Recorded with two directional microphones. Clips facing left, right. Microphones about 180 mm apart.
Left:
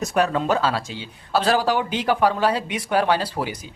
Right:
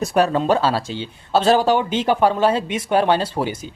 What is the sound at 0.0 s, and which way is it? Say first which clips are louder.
Speech: right 3 dB; 30° right (ahead or behind).